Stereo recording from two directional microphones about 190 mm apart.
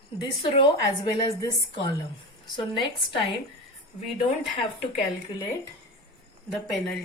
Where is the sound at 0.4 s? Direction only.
25° left (ahead or behind).